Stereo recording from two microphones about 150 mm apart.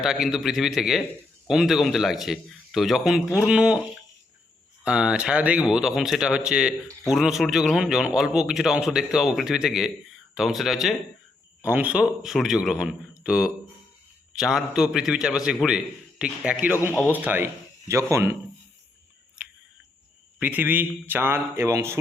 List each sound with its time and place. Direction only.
0.0 s speech: 5° right (ahead or behind)
4.8 s speech: 5° right (ahead or behind)
20.4 s speech: 10° right (ahead or behind)